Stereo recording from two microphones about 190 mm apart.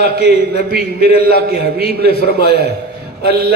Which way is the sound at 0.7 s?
55° right (ahead or behind).